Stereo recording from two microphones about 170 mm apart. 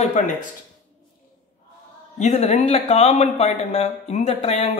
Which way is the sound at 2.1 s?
40° left (ahead or behind).